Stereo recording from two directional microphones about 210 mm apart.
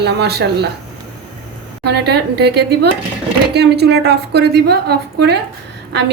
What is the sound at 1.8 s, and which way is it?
A woman's voice, 50° right (ahead or behind).